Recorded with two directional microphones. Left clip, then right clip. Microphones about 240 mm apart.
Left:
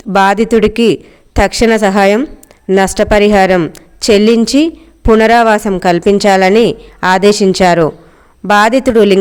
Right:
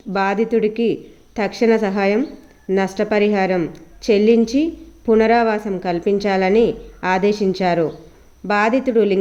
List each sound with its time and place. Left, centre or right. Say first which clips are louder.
0.1 s speech: left 9 dB; left